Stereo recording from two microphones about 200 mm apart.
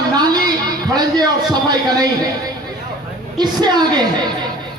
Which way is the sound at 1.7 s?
20° right (ahead or behind).